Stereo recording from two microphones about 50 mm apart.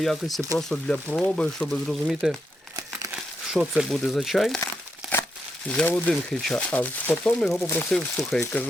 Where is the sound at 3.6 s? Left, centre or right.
Right.